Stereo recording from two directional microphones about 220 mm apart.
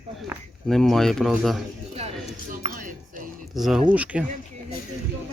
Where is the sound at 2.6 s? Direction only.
35° right (ahead or behind).